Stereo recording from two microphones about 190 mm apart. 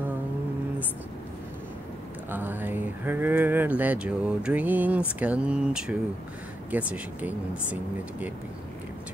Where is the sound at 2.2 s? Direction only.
10° right (ahead or behind).